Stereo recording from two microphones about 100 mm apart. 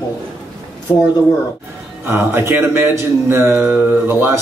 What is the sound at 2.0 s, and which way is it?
A man's voice, 20° right (ahead or behind).